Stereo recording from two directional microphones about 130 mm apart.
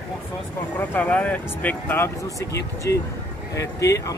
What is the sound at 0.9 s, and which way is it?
Speech, 10° left (ahead or behind).